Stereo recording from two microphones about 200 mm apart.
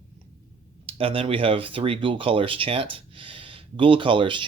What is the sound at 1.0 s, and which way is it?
Speech, 30° right (ahead or behind).